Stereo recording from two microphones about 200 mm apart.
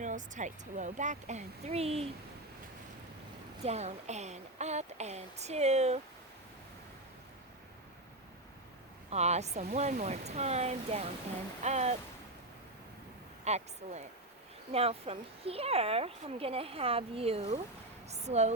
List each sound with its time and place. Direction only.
0.0 s a woman's voice: 40° right (ahead or behind)
3.6 s a woman's voice: 35° right (ahead or behind)
9.0 s a woman's voice: 35° right (ahead or behind)
13.4 s a woman's voice: 35° right (ahead or behind)